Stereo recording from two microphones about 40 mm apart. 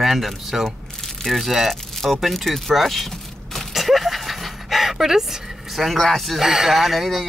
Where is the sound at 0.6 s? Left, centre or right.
Centre.